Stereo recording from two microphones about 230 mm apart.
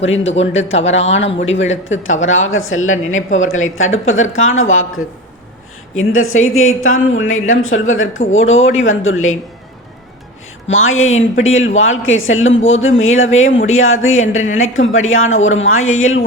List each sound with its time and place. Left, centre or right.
0.0 s speech: left
6.0 s speech: left
10.7 s speech: left